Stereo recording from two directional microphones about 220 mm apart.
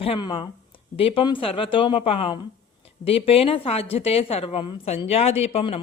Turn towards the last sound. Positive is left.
turn(degrees=25)  # may be behind; listen again after turning